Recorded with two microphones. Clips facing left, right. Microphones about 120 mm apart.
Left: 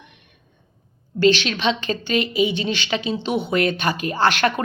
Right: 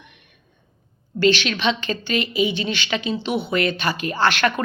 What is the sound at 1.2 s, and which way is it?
Speech, 40° left (ahead or behind).